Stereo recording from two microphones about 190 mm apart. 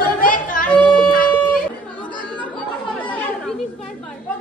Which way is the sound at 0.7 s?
5° left (ahead or behind).